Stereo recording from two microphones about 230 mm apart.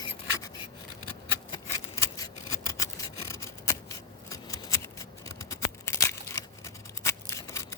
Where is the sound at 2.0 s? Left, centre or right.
Centre.